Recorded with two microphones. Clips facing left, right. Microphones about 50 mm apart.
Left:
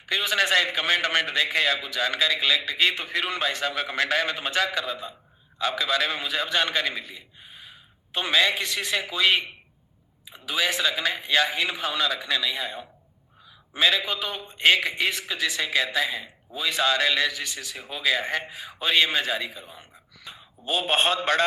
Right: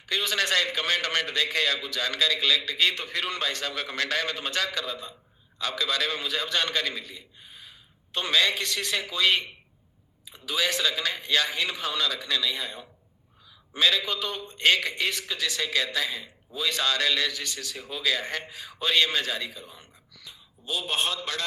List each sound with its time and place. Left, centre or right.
0.0 s a man's voice: centre
20.2 s a man's voice: left